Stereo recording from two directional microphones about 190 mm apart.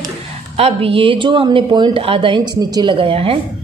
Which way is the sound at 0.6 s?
30° right (ahead or behind).